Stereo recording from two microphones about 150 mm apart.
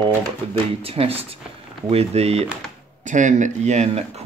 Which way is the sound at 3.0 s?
55° right (ahead or behind).